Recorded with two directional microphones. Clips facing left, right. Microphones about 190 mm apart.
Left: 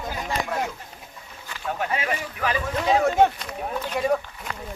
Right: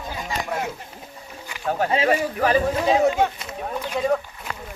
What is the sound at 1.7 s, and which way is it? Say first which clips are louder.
Speech: right 7 dB; 35° right (ahead or behind).